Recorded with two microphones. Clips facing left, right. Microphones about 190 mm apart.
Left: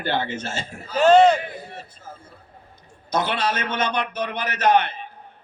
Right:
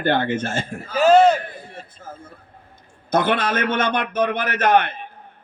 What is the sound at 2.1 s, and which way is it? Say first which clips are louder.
A man's voice: right 3 dB; 50° right (ahead or behind).